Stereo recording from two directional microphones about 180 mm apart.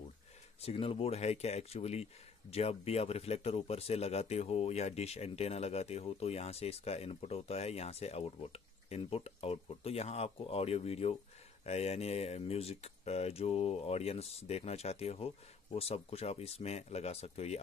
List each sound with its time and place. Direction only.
0.6 s speech: 35° left (ahead or behind)